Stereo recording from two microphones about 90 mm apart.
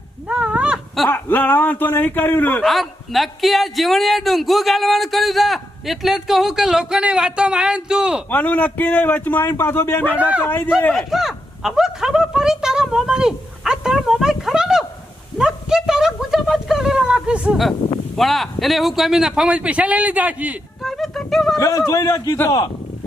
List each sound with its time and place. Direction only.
0.3 s a sound: 15° right (ahead or behind)
1.1 s a man's voice: 20° left (ahead or behind)
2.6 s a man's voice: centre (ahead or behind)
8.3 s a man's voice: 15° left (ahead or behind)
10.2 s speech: 15° right (ahead or behind)
10.4 s a man's voice: 20° left (ahead or behind)
10.9 s speech: 5° right (ahead or behind)
15.4 s a sound: 5° right (ahead or behind)
17.8 s speech: 45° left (ahead or behind)
18.2 s speech: centre (ahead or behind); by 20.6 s 15° right (ahead or behind)
20.8 s a sound: centre (ahead or behind)
21.6 s a man's voice: 35° left (ahead or behind)